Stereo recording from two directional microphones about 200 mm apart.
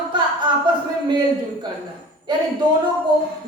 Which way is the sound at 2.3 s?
20° right (ahead or behind).